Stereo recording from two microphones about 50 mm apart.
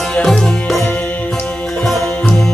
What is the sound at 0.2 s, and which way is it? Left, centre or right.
Music, centre.